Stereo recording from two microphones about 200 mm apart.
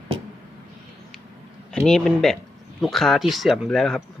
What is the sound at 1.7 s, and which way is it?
Speech, 5° left (ahead or behind).